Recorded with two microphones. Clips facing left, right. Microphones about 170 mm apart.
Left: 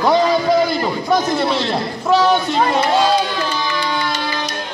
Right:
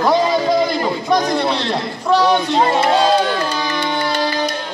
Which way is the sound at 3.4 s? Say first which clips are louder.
Right 1 dB; 45° right (ahead or behind).